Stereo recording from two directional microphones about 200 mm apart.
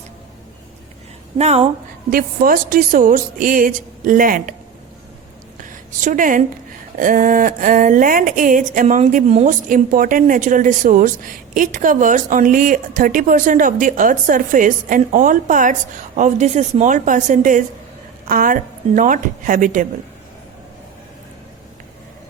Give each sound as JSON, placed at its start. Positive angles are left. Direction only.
{"t": 1.4, "sound": "speech", "side_deg": -30}
{"t": 2.0, "sound": "a woman's voice", "side_deg": -45}
{"t": 5.6, "sound": "a woman's voice", "side_deg": -40}